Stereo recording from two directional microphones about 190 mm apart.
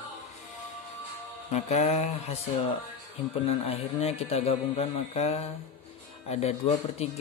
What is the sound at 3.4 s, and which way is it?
Speech, 30° left (ahead or behind).